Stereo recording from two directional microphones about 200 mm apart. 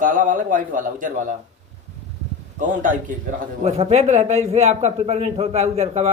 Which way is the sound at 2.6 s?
40° right (ahead or behind).